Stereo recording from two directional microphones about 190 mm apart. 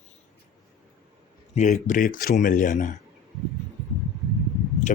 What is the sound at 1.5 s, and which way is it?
Speech, 40° left (ahead or behind).